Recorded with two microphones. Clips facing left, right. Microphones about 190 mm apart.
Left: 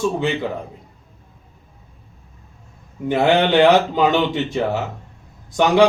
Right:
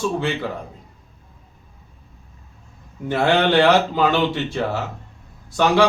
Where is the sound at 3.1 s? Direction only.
15° left (ahead or behind).